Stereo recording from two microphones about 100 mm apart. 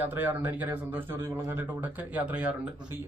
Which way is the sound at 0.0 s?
20° right (ahead or behind).